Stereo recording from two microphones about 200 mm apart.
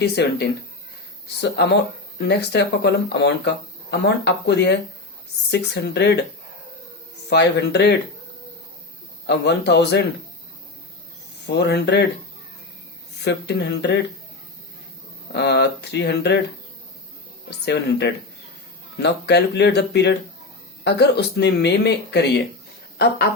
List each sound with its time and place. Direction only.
0.0 s speech: 60° left (ahead or behind)
7.3 s speech: 60° left (ahead or behind)
9.2 s speech: 55° left (ahead or behind)
11.4 s speech: 55° left (ahead or behind)
13.2 s speech: 55° left (ahead or behind)
15.3 s speech: 55° left (ahead or behind)
17.7 s speech: 55° left (ahead or behind)